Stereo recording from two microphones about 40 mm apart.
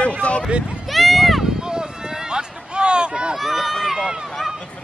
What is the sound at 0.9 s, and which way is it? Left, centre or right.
Run, centre.